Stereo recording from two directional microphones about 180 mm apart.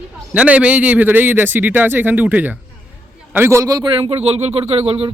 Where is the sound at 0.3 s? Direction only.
5° right (ahead or behind).